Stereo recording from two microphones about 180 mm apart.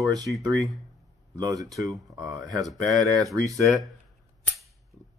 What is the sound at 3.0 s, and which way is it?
Speech, 20° right (ahead or behind).